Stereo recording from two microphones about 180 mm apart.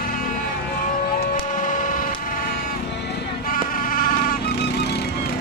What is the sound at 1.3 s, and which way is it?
Cacophony, 50° left (ahead or behind).